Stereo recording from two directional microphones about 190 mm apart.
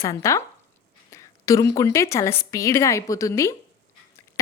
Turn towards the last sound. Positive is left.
turn(degrees=15)  # may be behind; listen again after turning